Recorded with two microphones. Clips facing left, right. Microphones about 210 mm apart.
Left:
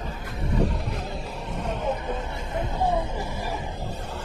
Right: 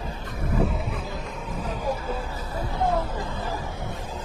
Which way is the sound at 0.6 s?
Centre (ahead or behind).